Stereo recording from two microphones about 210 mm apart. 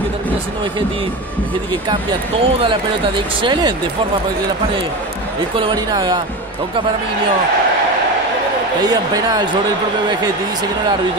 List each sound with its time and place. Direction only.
2.4 s speech: 25° right (ahead or behind)
5.6 s speech: 25° right (ahead or behind)
8.8 s speech: 15° right (ahead or behind)